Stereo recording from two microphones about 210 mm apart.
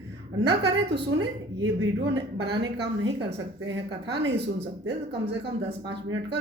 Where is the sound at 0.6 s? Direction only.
55° right (ahead or behind).